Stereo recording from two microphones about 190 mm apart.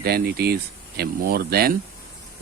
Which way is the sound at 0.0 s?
55° right (ahead or behind).